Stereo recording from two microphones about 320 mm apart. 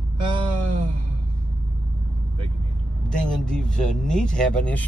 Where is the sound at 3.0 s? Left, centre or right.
Centre.